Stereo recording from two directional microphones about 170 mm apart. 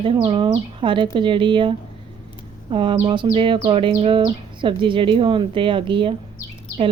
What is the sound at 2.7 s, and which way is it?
Speech, 30° right (ahead or behind).